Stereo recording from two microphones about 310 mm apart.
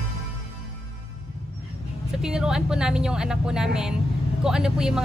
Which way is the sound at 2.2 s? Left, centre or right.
Centre.